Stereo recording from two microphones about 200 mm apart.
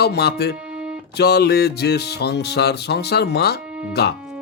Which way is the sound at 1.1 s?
55° left (ahead or behind).